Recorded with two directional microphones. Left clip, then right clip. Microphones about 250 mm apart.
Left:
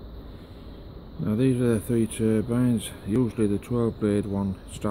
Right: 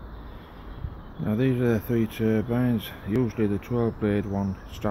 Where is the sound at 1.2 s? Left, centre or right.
Centre.